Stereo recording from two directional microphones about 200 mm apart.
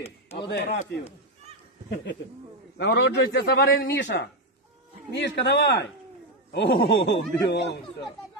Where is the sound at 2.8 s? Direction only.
60° left (ahead or behind).